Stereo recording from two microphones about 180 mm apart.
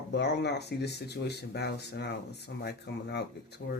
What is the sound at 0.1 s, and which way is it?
Speech, 70° left (ahead or behind).